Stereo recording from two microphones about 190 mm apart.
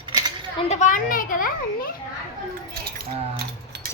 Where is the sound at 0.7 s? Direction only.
40° left (ahead or behind).